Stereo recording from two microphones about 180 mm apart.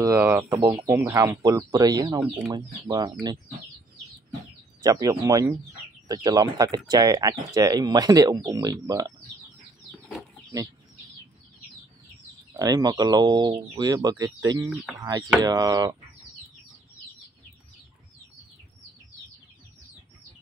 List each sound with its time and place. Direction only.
0.0 s speech: 15° right (ahead or behind)
2.2 s speech: 10° right (ahead or behind)
2.5 s speech: 20° right (ahead or behind)
4.8 s speech: 20° right (ahead or behind)
12.5 s speech: 20° right (ahead or behind)